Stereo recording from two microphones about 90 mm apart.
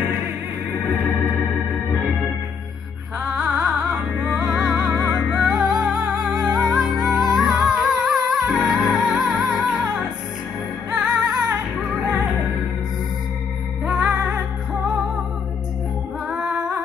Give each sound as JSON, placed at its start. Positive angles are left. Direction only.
{"t": 3.3, "sound": "music", "side_deg": -5}
{"t": 11.1, "sound": "music", "side_deg": -45}
{"t": 13.8, "sound": "music", "side_deg": -10}
{"t": 16.3, "sound": "music", "side_deg": -10}